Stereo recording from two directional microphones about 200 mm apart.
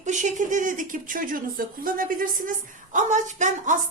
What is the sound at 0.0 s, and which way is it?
Speech, 35° right (ahead or behind).